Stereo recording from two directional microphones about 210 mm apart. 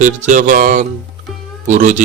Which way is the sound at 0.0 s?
35° right (ahead or behind).